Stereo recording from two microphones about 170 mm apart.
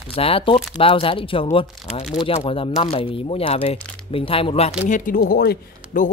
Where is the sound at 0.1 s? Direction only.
35° left (ahead or behind).